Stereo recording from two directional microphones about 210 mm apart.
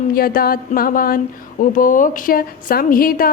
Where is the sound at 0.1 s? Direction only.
45° left (ahead or behind).